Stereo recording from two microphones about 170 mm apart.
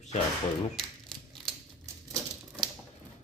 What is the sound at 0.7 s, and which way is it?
Crumpling, centre (ahead or behind).